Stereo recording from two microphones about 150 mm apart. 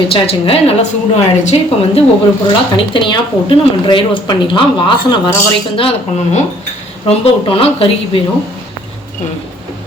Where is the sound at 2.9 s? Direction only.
35° left (ahead or behind).